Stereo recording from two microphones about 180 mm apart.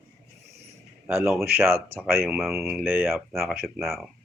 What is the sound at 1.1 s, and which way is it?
Speech, 15° right (ahead or behind).